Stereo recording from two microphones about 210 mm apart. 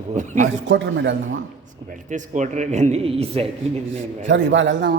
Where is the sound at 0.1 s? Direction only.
35° right (ahead or behind).